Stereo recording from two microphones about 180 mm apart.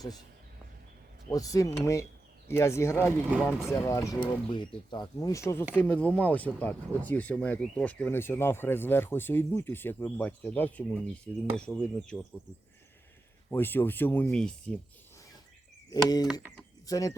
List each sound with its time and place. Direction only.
1.3 s speech: 20° left (ahead or behind)
3.2 s speech: 5° right (ahead or behind)
3.7 s speech: 15° left (ahead or behind)
13.5 s speech: 10° left (ahead or behind)
15.9 s speech: 20° left (ahead or behind)
16.2 s speech: 5° right (ahead or behind)
16.8 s speech: 20° left (ahead or behind)